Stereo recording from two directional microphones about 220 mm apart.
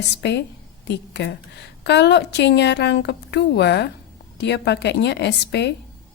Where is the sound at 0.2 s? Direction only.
50° left (ahead or behind).